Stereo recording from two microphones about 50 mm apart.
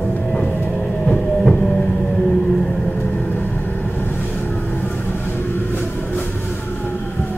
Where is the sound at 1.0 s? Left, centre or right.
Centre.